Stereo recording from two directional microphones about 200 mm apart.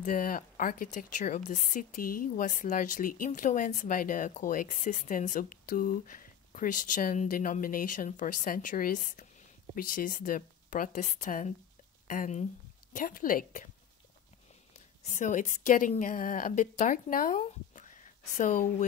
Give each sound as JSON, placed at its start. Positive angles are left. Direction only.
{"t": 0.0, "sound": "a woman's voice", "side_deg": 45}
{"t": 15.0, "sound": "speech", "side_deg": 40}
{"t": 17.4, "sound": "a sound", "side_deg": 35}